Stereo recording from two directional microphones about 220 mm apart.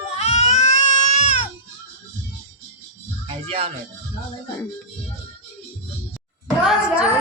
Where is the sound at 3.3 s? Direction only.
25° right (ahead or behind).